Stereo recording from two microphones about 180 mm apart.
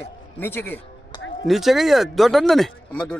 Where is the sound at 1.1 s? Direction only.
25° left (ahead or behind).